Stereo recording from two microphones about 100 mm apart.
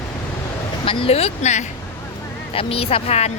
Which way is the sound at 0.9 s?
70° left (ahead or behind).